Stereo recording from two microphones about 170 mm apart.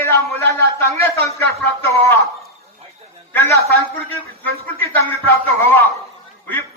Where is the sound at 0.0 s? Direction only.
15° left (ahead or behind).